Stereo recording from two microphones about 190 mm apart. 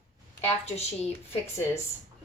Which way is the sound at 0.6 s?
35° left (ahead or behind).